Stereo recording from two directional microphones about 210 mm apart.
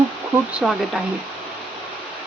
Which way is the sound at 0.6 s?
Centre (ahead or behind).